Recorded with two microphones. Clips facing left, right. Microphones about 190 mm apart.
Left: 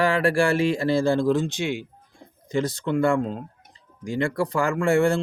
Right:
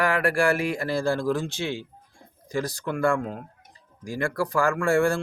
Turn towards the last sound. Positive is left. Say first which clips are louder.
# left 2 dB
turn(degrees=20)  # may be behind; listen again after turning